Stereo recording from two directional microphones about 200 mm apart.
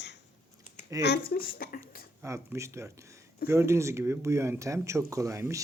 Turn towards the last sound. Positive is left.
turn(degrees=-15)  # may be behind; listen again after turning